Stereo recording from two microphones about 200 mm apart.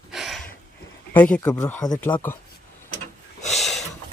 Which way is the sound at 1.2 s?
5° left (ahead or behind).